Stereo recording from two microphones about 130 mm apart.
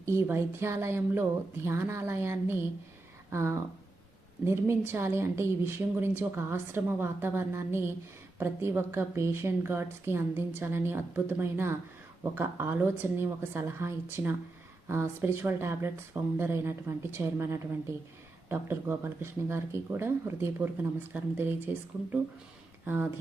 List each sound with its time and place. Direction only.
0.0 s a woman's voice: 20° right (ahead or behind)